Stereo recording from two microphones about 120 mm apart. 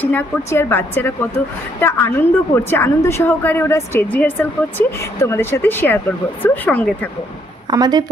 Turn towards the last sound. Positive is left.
turn(degrees=-35)  # may be behind; listen again after turning